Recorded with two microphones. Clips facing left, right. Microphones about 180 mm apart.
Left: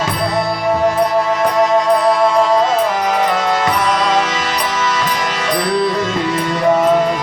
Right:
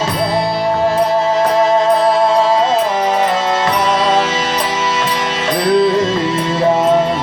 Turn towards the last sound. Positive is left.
turn(degrees=-25)  # may be behind; listen again after turning